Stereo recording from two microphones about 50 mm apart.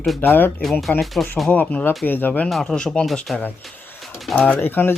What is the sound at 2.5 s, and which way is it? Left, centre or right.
Speech, centre.